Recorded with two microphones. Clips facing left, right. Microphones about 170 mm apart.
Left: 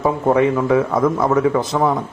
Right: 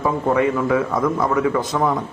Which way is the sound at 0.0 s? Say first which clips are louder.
Left 3 dB; 25° left (ahead or behind).